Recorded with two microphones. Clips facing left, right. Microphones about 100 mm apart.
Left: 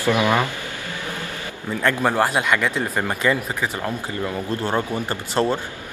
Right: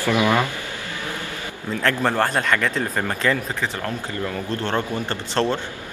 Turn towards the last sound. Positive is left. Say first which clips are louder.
# left 1 dB
turn(degrees=10)  # may be behind; listen again after turning